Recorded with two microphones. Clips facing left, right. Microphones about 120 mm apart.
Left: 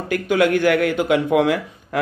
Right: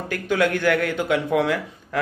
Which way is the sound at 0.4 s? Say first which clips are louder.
Left 4 dB; 15° left (ahead or behind).